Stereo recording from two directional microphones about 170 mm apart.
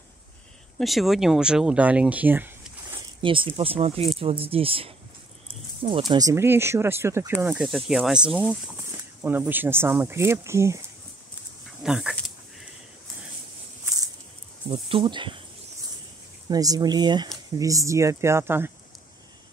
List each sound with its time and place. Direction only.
0.7 s speech: centre (ahead or behind)
3.2 s speech: 30° right (ahead or behind)
11.8 s dog: 5° right (ahead or behind)
14.7 s speech: 35° right (ahead or behind)
16.4 s speech: 20° right (ahead or behind)